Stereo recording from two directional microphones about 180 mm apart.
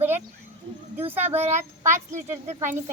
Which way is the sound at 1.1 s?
10° right (ahead or behind).